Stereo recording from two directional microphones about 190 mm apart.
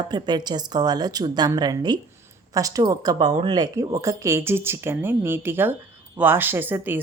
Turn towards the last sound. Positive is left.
turn(degrees=-10)  # may be behind; listen again after turning